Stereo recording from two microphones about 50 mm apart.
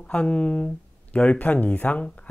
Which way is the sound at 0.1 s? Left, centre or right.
Centre.